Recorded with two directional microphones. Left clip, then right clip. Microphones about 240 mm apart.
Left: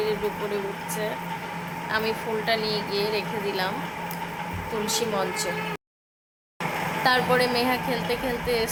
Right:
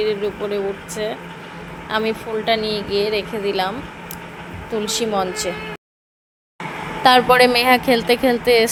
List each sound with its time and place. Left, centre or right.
0.0 s speech: right
4.9 s speech: right
7.0 s a woman's voice: right